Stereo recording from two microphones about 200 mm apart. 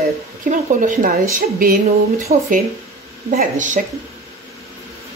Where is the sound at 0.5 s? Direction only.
40° right (ahead or behind).